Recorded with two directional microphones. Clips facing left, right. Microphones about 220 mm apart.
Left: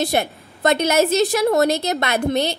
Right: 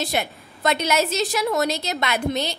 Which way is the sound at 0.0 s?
50° left (ahead or behind).